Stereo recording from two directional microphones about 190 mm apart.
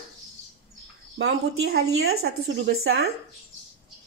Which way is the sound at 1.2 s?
60° right (ahead or behind).